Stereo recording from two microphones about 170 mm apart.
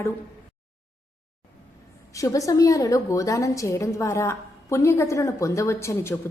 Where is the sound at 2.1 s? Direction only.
20° left (ahead or behind).